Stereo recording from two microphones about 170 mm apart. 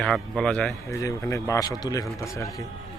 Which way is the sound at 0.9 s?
20° left (ahead or behind).